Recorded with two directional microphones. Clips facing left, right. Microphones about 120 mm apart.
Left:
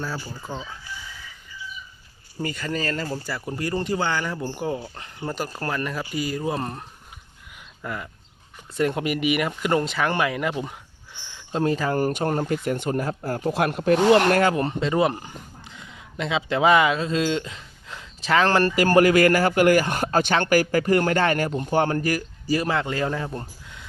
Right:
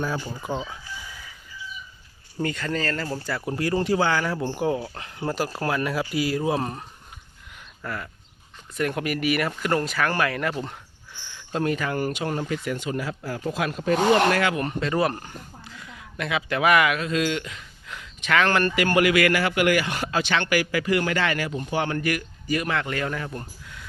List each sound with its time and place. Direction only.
0.3 s speech: 15° right (ahead or behind)
2.4 s speech: 5° left (ahead or behind)
3.2 s speech: centre (ahead or behind)
7.8 s speech: 15° left (ahead or behind); by 14.6 s 40° left (ahead or behind)
14.6 s speech: 25° left (ahead or behind)